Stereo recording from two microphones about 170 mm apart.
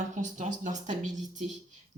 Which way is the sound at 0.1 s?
45° right (ahead or behind).